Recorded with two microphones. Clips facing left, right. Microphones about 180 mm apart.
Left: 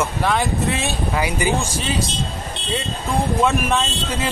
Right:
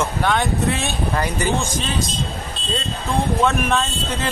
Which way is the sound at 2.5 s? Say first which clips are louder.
Left 1 dB; 70° left (ahead or behind).